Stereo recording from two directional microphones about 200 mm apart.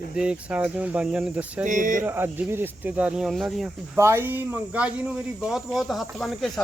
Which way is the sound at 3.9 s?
15° right (ahead or behind).